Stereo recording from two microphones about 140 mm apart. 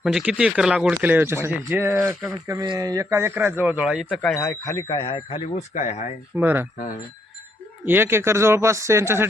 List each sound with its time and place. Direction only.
0.0 s speech: 5° right (ahead or behind)
4.4 s speech: 20° left (ahead or behind)
4.9 s speech: 40° left (ahead or behind); by 6.1 s 55° left (ahead or behind)
6.3 s speech: 15° right (ahead or behind)
7.9 s speech: 15° right (ahead or behind)